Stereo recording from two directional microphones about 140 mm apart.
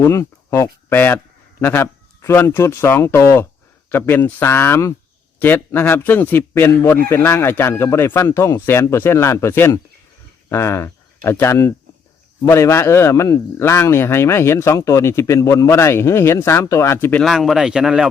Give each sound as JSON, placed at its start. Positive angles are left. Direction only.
{"t": 0.0, "sound": "speech", "side_deg": 20}
{"t": 17.2, "sound": "a man's voice", "side_deg": 0}